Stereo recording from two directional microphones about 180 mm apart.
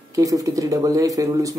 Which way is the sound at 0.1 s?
20° right (ahead or behind).